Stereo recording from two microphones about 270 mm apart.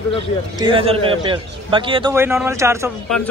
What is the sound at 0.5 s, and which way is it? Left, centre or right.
Speech, centre.